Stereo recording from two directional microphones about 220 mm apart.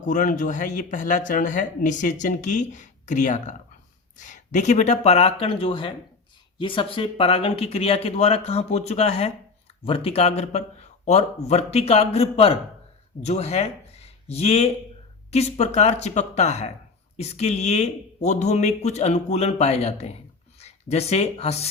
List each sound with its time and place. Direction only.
0.0 s speech: 35° left (ahead or behind)